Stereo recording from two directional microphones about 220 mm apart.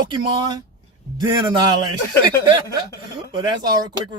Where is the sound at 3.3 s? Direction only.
20° right (ahead or behind).